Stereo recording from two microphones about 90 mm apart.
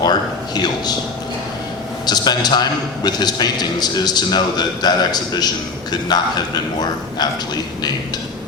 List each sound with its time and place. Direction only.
0.0 s a man's voice: 50° left (ahead or behind)
2.0 s a man's voice: 50° left (ahead or behind)